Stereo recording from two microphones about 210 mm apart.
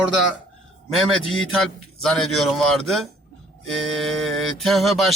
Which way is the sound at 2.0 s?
Centre (ahead or behind).